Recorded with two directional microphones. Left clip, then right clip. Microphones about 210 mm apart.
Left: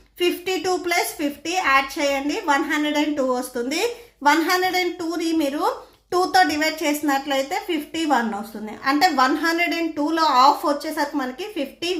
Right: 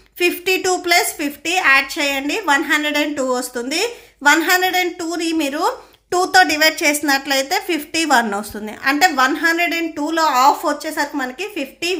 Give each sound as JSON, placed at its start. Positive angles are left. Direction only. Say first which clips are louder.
{"t": 0.2, "sound": "a woman's voice", "louder": "right 5 dB", "side_deg": -25}